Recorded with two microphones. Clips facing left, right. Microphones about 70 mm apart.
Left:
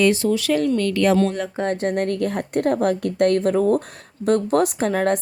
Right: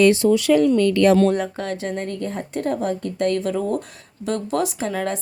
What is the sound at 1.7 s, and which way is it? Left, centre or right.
A woman's voice, left.